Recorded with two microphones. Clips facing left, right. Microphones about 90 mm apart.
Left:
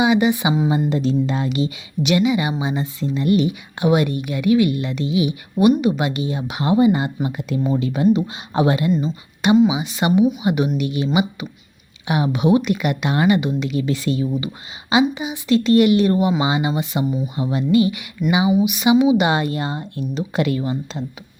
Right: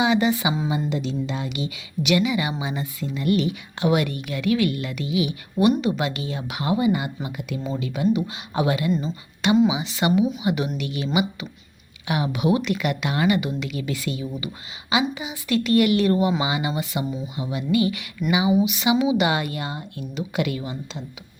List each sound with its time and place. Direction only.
0.0 s speech: 15° left (ahead or behind)
0.9 s speech: 40° left (ahead or behind)
17.3 s speech: 35° left (ahead or behind)